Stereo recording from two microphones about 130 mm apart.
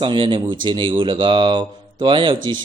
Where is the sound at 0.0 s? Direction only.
40° right (ahead or behind).